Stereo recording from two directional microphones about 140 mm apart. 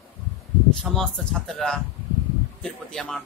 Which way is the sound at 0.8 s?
5° left (ahead or behind).